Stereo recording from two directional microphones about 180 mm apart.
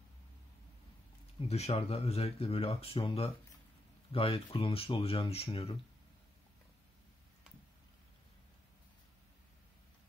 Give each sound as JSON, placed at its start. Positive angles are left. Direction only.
{"t": 1.5, "sound": "speech", "side_deg": 35}